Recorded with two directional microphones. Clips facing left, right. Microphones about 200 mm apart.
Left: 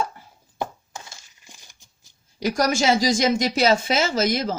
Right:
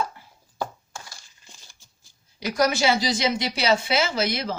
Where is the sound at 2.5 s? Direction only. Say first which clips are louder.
Left 1 dB; 45° left (ahead or behind).